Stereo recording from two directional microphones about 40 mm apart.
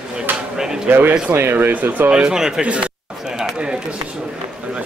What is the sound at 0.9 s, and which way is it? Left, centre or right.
Speech, right.